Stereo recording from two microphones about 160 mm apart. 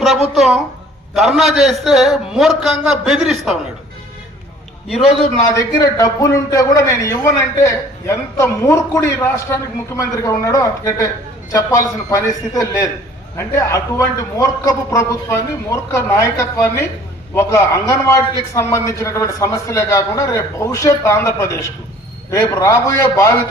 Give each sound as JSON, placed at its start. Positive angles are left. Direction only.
{"t": 0.3, "sound": "a man's voice", "side_deg": 0}
{"t": 5.4, "sound": "a man's voice", "side_deg": 20}